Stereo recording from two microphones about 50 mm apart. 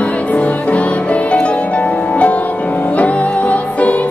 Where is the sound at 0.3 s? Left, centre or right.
Left.